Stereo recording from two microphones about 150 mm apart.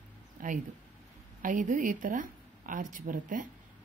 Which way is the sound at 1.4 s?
65° right (ahead or behind).